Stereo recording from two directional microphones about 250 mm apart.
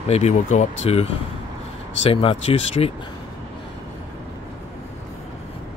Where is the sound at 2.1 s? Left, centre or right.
Left.